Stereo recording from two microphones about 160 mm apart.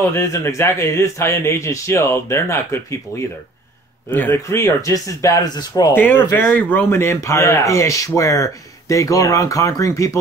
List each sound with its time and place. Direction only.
0.1 s speech: 15° left (ahead or behind)
5.9 s speech: 10° left (ahead or behind)